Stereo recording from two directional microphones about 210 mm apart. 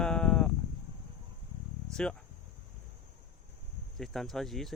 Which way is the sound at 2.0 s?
5° left (ahead or behind).